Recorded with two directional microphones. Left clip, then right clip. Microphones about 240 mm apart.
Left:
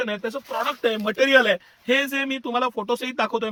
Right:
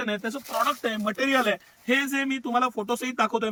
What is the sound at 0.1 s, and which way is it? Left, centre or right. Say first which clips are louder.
Speech: left 2 dB; left.